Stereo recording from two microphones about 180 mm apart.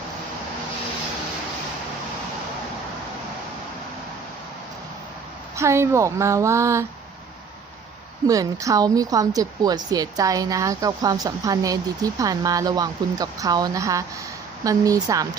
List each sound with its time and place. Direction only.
5.5 s speech: 15° right (ahead or behind)
8.3 s speech: 20° right (ahead or behind)